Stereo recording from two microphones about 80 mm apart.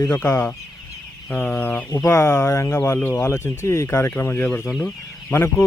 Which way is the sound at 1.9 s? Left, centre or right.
Left.